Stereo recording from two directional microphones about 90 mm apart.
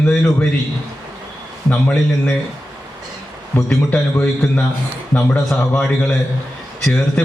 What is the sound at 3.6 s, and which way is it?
Speech, 15° left (ahead or behind).